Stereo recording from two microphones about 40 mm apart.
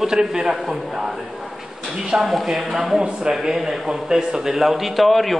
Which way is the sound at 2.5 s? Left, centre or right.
Centre.